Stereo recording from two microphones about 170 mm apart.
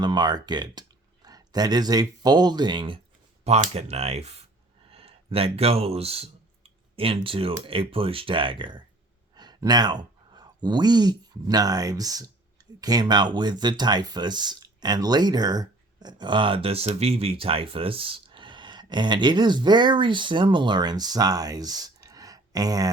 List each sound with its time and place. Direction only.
0.0 s speech: 25° right (ahead or behind)